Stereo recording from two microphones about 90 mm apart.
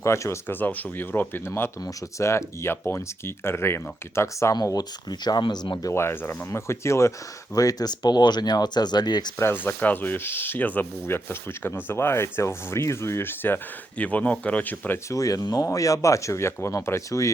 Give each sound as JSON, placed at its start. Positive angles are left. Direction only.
{"t": 0.0, "sound": "speech", "side_deg": 30}
{"t": 4.5, "sound": "speech", "side_deg": 45}
{"t": 5.9, "sound": "speech", "side_deg": 30}
{"t": 9.4, "sound": "speech", "side_deg": 25}
{"t": 15.1, "sound": "speech", "side_deg": 40}